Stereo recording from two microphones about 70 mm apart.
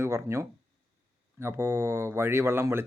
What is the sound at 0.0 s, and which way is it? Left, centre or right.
Speech, right.